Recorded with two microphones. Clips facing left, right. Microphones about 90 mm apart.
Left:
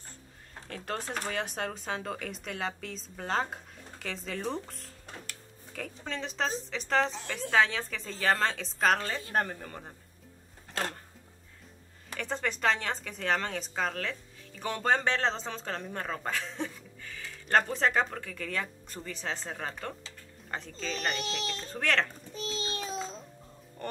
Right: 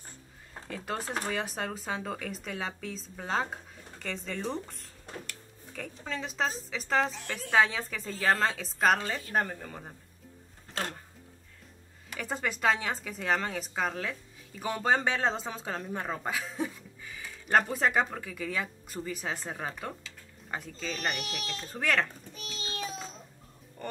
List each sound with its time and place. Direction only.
0.7 s speech: 5° right (ahead or behind)
12.2 s speech: 5° right (ahead or behind)
22.3 s child singing: 30° left (ahead or behind)
23.8 s music: centre (ahead or behind)